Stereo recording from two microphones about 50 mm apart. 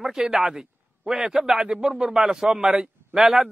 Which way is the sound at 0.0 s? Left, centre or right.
Centre.